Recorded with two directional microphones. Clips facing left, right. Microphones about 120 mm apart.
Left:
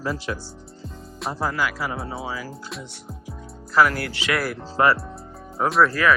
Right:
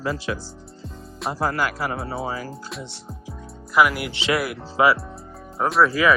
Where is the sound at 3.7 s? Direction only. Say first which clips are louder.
Even; 10° right (ahead or behind).